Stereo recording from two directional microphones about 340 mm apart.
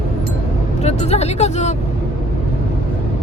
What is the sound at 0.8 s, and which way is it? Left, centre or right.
Speech, centre.